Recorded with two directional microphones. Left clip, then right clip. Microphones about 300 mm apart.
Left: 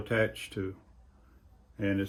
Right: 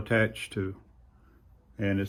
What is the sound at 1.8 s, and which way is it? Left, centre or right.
Speech, centre.